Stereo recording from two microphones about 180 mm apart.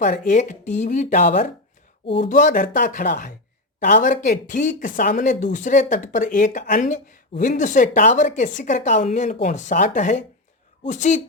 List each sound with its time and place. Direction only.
0.0 s speech: 45° left (ahead or behind)